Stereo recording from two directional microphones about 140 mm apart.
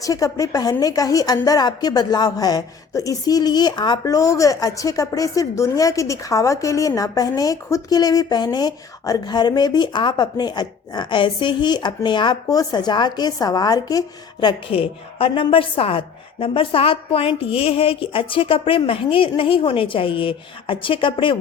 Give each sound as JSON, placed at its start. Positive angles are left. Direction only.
{"t": 0.0, "sound": "a woman's voice", "side_deg": 25}
{"t": 14.4, "sound": "a woman's voice", "side_deg": 40}